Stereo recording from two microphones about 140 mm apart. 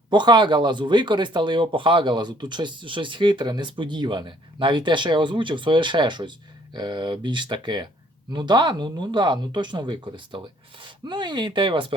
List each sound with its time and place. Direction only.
0.1 s speech: 30° right (ahead or behind)